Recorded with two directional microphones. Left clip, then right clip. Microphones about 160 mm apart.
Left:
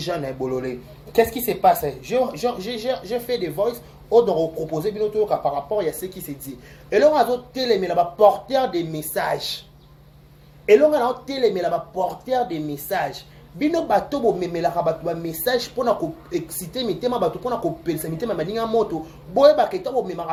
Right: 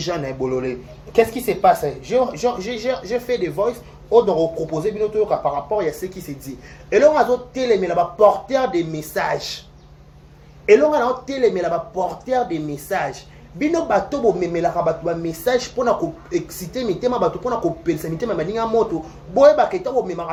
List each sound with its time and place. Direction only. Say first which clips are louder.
0.0 s speech: right 2 dB; centre (ahead or behind)
7.5 s speech: right 2 dB; 5° left (ahead or behind)
10.7 s speech: right 1 dB; centre (ahead or behind)